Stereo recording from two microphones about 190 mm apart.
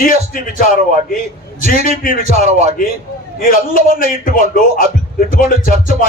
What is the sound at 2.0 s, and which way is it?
A man's voice, 45° left (ahead or behind).